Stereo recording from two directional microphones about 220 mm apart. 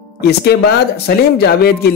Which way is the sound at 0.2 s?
45° left (ahead or behind).